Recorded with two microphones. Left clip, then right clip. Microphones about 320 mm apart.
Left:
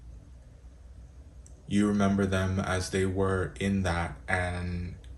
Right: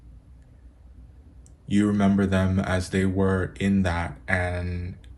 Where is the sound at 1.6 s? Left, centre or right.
Right.